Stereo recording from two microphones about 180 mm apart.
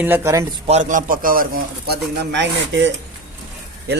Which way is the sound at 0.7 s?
45° right (ahead or behind).